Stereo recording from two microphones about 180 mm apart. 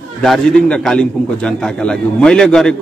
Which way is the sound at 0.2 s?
Centre (ahead or behind).